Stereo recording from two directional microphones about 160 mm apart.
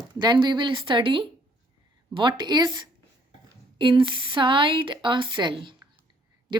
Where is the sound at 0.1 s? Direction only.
30° right (ahead or behind).